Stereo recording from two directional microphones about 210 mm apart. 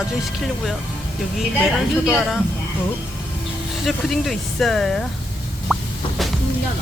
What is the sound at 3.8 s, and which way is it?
Speech, centre (ahead or behind).